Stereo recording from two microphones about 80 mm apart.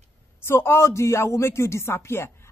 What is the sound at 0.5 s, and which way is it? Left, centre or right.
Speech, left.